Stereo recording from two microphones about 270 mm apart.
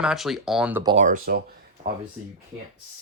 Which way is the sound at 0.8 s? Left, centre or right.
Right.